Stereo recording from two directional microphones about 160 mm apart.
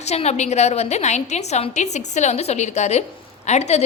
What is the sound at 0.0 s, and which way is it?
A woman's voice, 45° left (ahead or behind).